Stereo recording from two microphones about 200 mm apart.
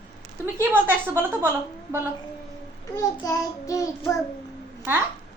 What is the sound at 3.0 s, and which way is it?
A child's voice, 15° left (ahead or behind).